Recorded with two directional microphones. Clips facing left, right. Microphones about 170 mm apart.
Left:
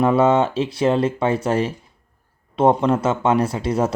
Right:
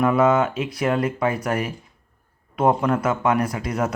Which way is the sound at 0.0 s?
30° left (ahead or behind).